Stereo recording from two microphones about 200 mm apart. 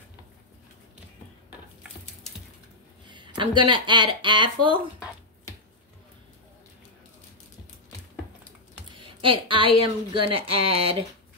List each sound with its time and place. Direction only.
3.1 s speech: 25° right (ahead or behind)
8.9 s a sound: 25° right (ahead or behind)
10.1 s speech: 25° right (ahead or behind)